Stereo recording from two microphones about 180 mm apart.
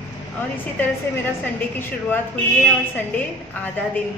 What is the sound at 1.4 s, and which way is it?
Speech, 10° left (ahead or behind).